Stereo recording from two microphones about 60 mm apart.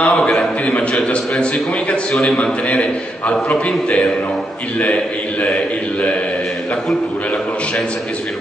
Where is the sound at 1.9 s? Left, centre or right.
Centre.